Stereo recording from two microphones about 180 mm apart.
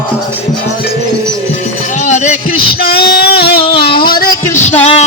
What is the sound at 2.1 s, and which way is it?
Music, 40° left (ahead or behind).